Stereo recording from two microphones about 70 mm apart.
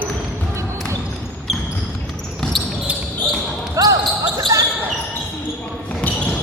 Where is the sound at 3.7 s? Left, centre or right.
Right.